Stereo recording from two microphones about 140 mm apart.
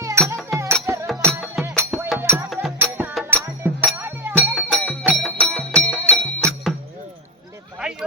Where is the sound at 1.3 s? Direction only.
Centre (ahead or behind).